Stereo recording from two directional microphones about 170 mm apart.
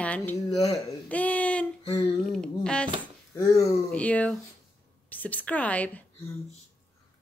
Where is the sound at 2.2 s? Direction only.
Centre (ahead or behind).